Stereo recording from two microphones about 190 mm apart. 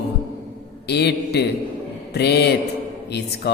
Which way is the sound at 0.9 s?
60° left (ahead or behind).